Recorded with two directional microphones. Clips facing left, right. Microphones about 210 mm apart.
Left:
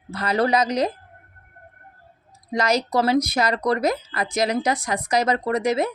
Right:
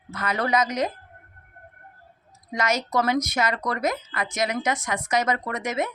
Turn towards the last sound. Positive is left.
turn(degrees=35)  # may be behind; listen again after turning